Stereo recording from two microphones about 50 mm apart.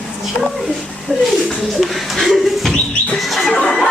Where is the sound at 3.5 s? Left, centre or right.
Centre.